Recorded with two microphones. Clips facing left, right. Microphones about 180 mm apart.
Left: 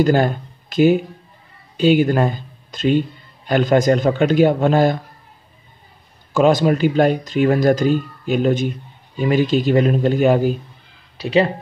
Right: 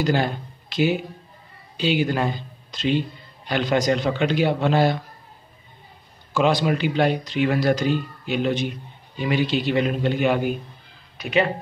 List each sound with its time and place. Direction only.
0.0 s speech: 50° left (ahead or behind)
6.3 s speech: 45° left (ahead or behind)